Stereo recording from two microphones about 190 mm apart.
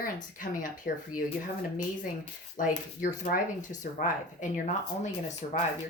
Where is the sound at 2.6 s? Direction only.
45° left (ahead or behind).